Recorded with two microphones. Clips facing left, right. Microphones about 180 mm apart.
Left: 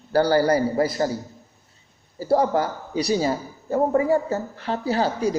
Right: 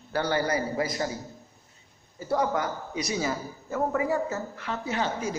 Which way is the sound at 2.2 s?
35° left (ahead or behind).